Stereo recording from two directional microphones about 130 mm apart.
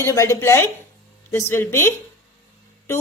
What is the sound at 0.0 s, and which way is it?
A woman's voice, 20° left (ahead or behind).